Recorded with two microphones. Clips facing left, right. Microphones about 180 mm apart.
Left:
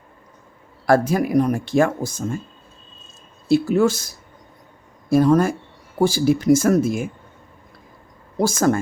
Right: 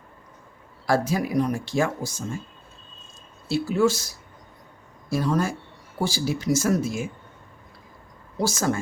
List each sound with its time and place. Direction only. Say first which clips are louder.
0.9 s speech: left 6 dB; 55° left (ahead or behind)
3.5 s speech: left 5 dB; 55° left (ahead or behind)
8.4 s speech: left 6 dB; 50° left (ahead or behind)